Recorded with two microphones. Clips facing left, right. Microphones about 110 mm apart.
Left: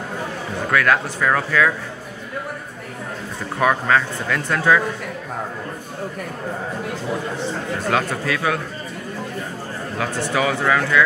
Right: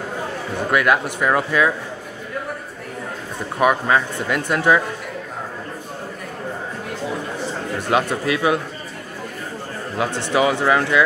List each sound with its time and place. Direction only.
0.7 s speech: 15° right (ahead or behind)
3.5 s speech: 15° right (ahead or behind)
7.9 s speech: 20° right (ahead or behind)
9.9 s speech: 20° right (ahead or behind)